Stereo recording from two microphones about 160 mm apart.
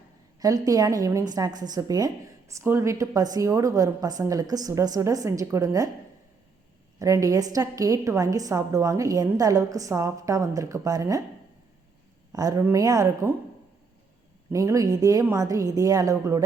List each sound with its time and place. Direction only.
0.3 s a woman's voice: 20° right (ahead or behind)
7.0 s a woman's voice: 20° right (ahead or behind)
12.3 s a woman's voice: 20° right (ahead or behind)
14.5 s a woman's voice: 20° right (ahead or behind)